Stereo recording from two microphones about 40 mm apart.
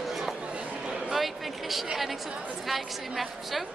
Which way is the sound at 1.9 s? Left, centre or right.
Centre.